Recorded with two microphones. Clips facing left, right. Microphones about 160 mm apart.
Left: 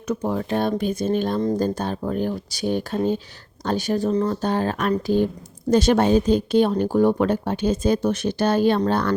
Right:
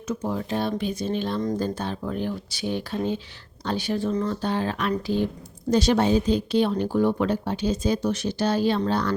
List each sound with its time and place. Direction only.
0.1 s speech: 60° left (ahead or behind)
0.7 s speech: 45° left (ahead or behind)
1.4 s speech: 30° left (ahead or behind)
1.6 s speech: 45° left (ahead or behind)